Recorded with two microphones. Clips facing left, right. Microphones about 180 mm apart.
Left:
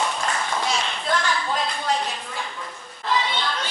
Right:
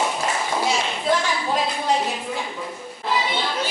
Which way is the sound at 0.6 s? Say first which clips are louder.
Right 3 dB; 10° right (ahead or behind).